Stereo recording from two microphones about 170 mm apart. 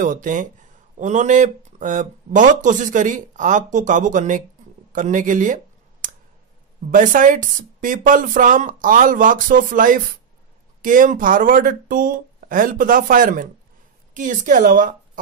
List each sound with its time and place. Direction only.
0.0 s speech: 50° right (ahead or behind)
4.9 s a sound: 50° right (ahead or behind)
6.9 s speech: 50° right (ahead or behind)